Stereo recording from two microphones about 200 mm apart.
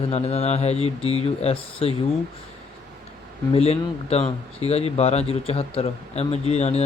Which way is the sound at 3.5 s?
30° left (ahead or behind).